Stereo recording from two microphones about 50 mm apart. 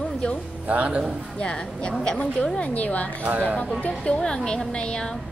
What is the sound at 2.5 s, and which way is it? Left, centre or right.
Speech, left.